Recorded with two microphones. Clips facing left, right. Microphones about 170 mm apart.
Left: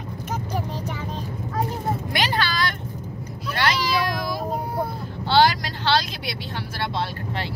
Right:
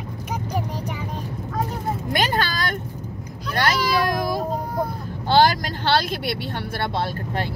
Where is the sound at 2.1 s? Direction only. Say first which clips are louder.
Right 4 dB; 45° right (ahead or behind).